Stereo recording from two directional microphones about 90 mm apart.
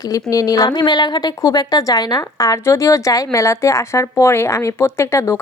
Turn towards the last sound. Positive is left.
turn(degrees=35)  # may be behind; listen again after turning